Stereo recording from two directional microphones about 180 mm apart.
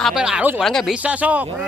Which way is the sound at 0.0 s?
5° right (ahead or behind).